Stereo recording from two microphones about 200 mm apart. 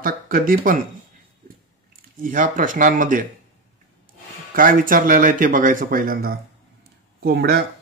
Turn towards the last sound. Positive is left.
turn(degrees=-50)  # may be behind; listen again after turning